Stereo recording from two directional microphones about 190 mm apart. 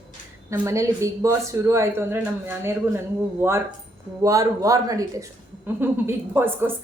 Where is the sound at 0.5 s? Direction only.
15° right (ahead or behind).